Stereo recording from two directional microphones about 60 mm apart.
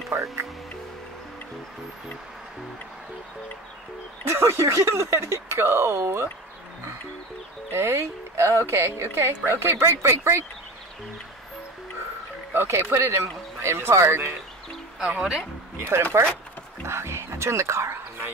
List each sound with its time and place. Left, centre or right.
0.1 s speech: right
4.2 s speech: right
7.7 s speech: right
12.5 s speech: right
15.0 s speech: centre
15.9 s speech: right